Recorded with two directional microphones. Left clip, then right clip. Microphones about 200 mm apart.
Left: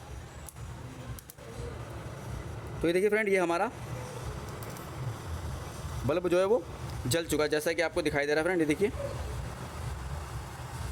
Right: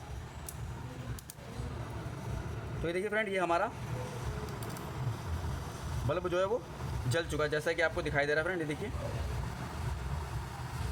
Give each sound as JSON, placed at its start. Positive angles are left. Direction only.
{"t": 2.8, "sound": "speech", "side_deg": 40}
{"t": 6.1, "sound": "speech", "side_deg": 40}